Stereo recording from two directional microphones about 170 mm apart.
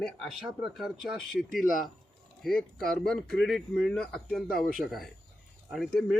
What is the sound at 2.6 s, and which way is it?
Speech, centre (ahead or behind).